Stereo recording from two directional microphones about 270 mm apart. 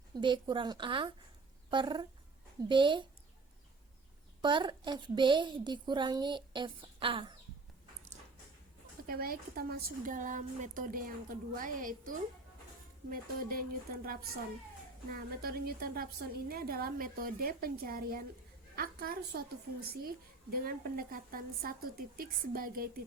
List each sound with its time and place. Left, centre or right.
0.1 s a woman's voice: centre
4.4 s a woman's voice: centre
9.0 s a woman's voice: right